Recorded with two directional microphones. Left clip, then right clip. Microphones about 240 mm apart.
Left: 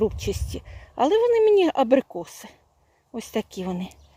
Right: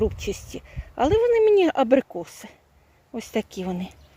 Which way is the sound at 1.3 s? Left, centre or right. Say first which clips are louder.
Right 1 dB; left.